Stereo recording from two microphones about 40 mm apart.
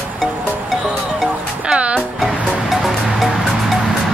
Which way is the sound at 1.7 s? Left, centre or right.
Right.